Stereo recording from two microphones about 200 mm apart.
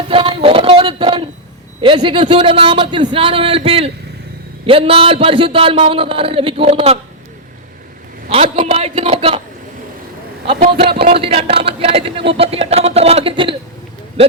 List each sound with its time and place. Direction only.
0.1 s a sound: 25° right (ahead or behind)
1.8 s speech: 25° right (ahead or behind)
8.3 s speech: 25° right (ahead or behind)
10.7 s speech: 25° right (ahead or behind)